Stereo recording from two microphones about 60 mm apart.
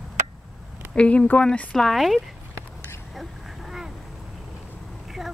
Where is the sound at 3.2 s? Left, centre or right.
Centre.